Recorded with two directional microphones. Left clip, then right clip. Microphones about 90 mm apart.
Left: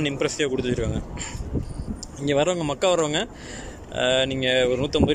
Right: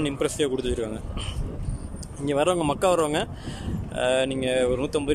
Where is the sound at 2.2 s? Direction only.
25° right (ahead or behind).